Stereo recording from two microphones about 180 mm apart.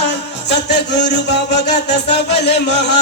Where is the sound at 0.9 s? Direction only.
45° left (ahead or behind).